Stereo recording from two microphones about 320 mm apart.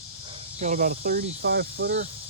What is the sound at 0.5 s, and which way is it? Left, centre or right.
Speech, right.